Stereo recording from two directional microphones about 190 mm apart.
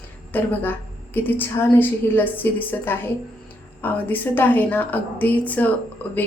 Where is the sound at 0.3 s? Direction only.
10° left (ahead or behind).